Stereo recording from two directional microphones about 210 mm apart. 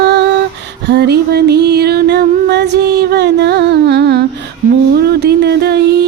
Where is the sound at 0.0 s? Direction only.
55° right (ahead or behind).